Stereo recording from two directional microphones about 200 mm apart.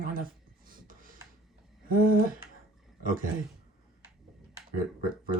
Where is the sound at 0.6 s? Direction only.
45° right (ahead or behind).